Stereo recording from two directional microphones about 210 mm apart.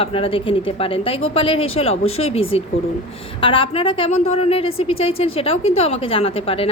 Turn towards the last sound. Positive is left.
turn(degrees=25)  # may be behind; listen again after turning